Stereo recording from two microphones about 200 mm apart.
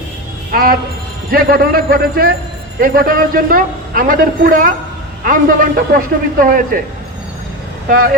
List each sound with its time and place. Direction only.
0.5 s a man's voice: 45° right (ahead or behind)
7.9 s a man's voice: 45° right (ahead or behind)